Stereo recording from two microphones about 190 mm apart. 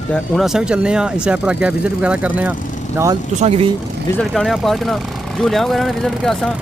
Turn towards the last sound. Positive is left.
turn(degrees=0)  # may be behind; listen again after turning